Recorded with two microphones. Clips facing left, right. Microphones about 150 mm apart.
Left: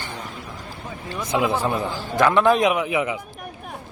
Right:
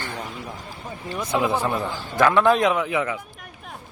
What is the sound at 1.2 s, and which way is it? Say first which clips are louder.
Speech: left 1 dB; 15° left (ahead or behind).